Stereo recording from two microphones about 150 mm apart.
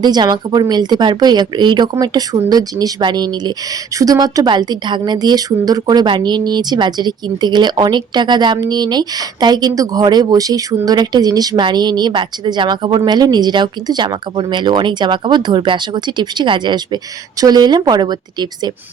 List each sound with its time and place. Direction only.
0.0 s speech: 30° right (ahead or behind)